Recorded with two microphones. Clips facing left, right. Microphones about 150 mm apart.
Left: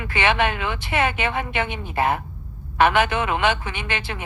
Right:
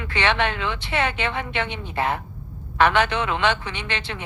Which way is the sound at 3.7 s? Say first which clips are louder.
Left 1 dB; 50° left (ahead or behind).